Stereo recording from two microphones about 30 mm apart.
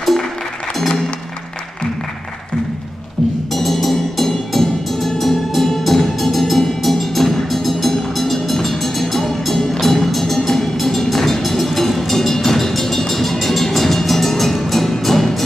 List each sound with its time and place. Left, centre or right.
0.7 s music: centre
3.5 s music: centre